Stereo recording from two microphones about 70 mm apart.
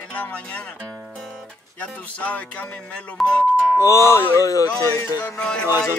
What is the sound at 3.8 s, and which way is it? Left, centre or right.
Music, left.